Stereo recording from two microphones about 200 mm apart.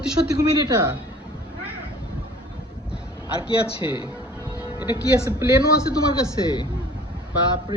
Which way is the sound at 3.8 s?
25° left (ahead or behind).